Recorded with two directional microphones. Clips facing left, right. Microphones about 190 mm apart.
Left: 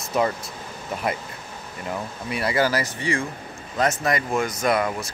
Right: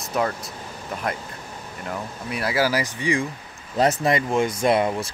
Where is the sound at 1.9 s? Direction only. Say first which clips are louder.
Left 1 dB; centre (ahead or behind); by 3.3 s 15° right (ahead or behind).